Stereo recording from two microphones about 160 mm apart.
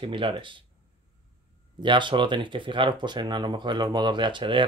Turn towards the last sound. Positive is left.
turn(degrees=-30)  # may be behind; listen again after turning